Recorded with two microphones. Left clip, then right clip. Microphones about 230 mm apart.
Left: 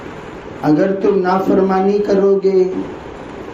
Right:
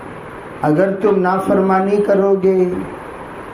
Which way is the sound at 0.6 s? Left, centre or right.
Right.